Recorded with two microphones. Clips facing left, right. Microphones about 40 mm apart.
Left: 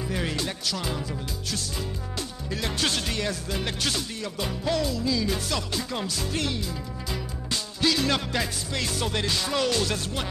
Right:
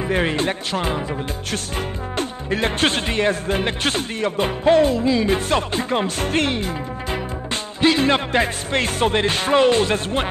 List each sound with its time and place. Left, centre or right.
0.1 s speech: right
2.1 s speech: right